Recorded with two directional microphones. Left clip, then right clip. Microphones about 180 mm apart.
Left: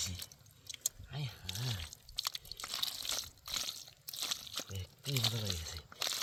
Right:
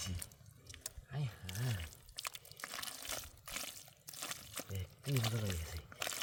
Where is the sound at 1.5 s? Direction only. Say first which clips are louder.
Left 3 dB; 20° right (ahead or behind).